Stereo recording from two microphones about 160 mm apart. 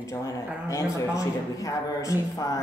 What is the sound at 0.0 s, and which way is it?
Speech, 20° left (ahead or behind).